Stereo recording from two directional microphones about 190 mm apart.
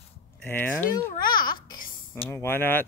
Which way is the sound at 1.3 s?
50° left (ahead or behind).